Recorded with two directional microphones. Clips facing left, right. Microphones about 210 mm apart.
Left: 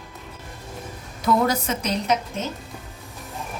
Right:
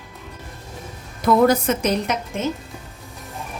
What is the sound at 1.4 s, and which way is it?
Speech, 55° right (ahead or behind).